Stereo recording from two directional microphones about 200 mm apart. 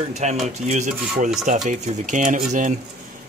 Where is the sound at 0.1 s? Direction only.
35° right (ahead or behind).